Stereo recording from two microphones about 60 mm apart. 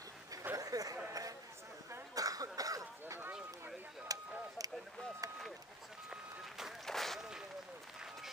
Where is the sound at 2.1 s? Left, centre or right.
Right.